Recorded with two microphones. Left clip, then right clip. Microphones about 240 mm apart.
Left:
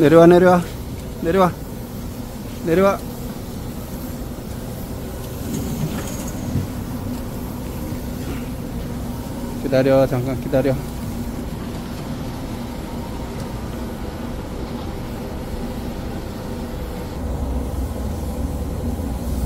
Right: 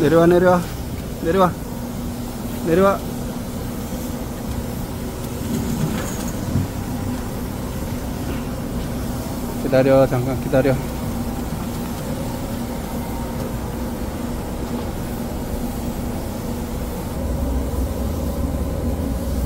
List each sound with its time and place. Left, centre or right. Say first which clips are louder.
0.0 s speech: left 3 dB; left
2.7 s speech: even; centre
9.7 s a man's voice: right 1 dB; centre